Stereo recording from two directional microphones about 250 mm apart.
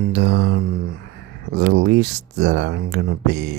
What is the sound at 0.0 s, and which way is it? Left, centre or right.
Mantra, right.